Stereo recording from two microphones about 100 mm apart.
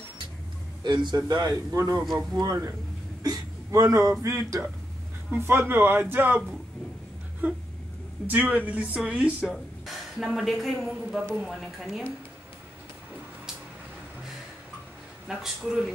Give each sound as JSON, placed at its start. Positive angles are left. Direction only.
{"t": 0.8, "sound": "speech", "side_deg": -50}
{"t": 8.3, "sound": "speech", "side_deg": -15}
{"t": 15.2, "sound": "speech", "side_deg": -5}